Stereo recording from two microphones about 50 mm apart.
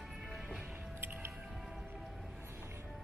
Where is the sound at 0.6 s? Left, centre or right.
Centre.